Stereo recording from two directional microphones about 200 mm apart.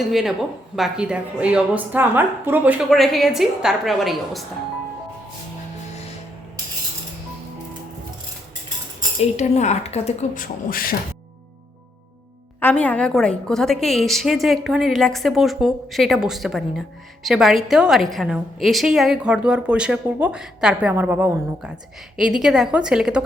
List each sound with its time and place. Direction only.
0.1 s a woman's voice: centre (ahead or behind)
2.9 s a woman's voice: centre (ahead or behind)
9.2 s speech: 35° left (ahead or behind)
12.5 s a woman's voice: 10° left (ahead or behind)